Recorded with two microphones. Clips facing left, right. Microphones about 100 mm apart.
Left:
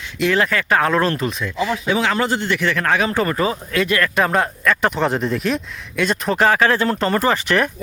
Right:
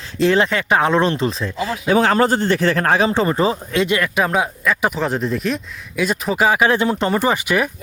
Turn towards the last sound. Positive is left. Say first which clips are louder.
# even
turn(degrees=-10)  # may be behind; listen again after turning